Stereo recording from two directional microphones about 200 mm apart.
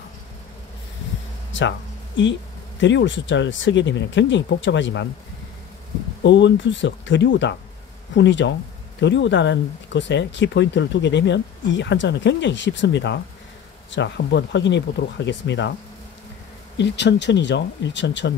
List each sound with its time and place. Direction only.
1.5 s a sound: 65° left (ahead or behind)
2.8 s speech: 65° left (ahead or behind)
6.2 s speech: 65° left (ahead or behind)
16.7 s speech: 60° left (ahead or behind)